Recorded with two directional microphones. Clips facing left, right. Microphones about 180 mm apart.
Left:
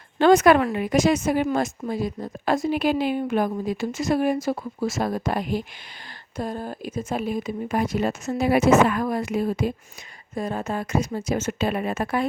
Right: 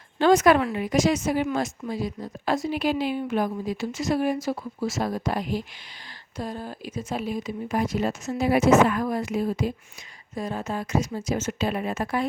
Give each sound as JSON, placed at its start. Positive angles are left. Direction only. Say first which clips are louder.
{"t": 0.2, "sound": "a woman's voice", "louder": "left 2 dB", "side_deg": 60}